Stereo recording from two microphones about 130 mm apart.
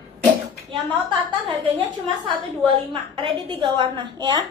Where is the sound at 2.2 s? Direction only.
40° right (ahead or behind).